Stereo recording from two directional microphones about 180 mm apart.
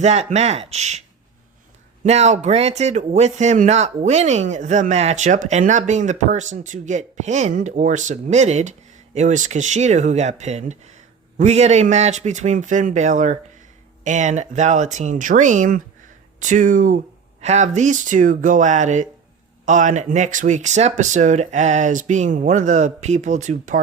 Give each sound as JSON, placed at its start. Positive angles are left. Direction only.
{"t": 0.0, "sound": "speech", "side_deg": -40}
{"t": 2.0, "sound": "speech", "side_deg": -40}